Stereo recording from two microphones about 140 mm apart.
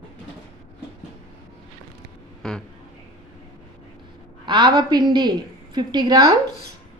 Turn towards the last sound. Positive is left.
turn(degrees=-30)  # may be behind; listen again after turning